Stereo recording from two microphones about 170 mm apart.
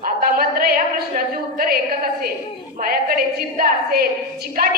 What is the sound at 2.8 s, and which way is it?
A woman's voice, 60° right (ahead or behind).